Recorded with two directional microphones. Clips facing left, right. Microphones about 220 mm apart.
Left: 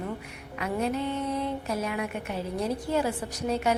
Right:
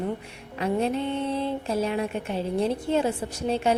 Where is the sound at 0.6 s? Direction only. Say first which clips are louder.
Right 3 dB; 30° right (ahead or behind).